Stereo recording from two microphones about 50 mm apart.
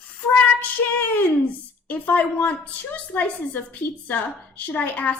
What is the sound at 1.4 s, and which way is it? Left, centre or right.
A woman's voice, left.